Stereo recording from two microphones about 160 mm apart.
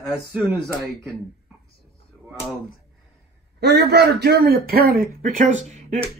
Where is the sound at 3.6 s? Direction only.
90° right.